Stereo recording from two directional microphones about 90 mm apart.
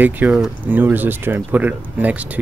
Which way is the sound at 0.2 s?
20° right (ahead or behind).